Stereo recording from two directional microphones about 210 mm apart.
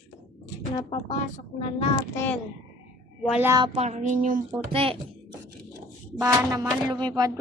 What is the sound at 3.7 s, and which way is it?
Speech, 30° right (ahead or behind).